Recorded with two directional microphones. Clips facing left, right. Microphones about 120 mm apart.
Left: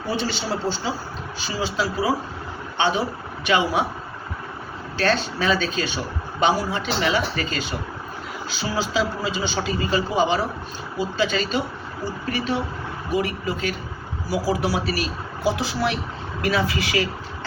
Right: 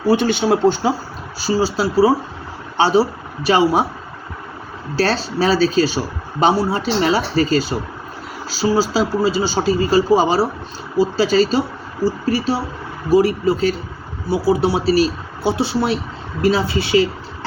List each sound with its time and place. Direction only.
0.1 s speech: 50° right (ahead or behind)
1.4 s speech: 35° right (ahead or behind)
4.9 s speech: 35° right (ahead or behind)